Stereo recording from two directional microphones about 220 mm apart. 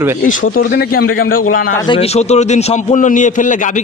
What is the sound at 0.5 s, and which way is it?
Speech, 40° left (ahead or behind).